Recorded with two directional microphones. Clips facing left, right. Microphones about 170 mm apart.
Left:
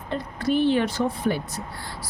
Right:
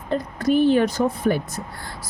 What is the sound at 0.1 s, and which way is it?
Speech, 45° right (ahead or behind).